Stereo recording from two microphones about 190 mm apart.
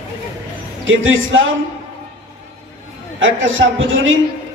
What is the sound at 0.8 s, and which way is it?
Speech, 90° right.